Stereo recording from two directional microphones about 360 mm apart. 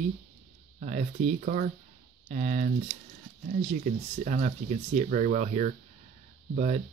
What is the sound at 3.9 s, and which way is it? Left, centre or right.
Speech, centre.